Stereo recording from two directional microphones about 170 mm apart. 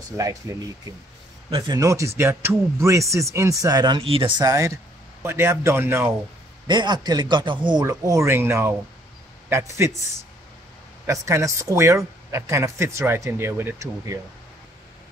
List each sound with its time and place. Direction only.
0.2 s speech: 20° right (ahead or behind)
6.7 s speech: 25° right (ahead or behind)
11.1 s speech: 15° right (ahead or behind)